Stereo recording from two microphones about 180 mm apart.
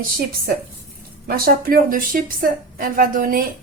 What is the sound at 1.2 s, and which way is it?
A woman's voice, 55° right (ahead or behind).